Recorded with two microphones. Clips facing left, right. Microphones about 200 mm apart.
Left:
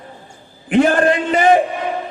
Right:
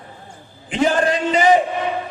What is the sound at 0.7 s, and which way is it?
Speech, 55° left (ahead or behind).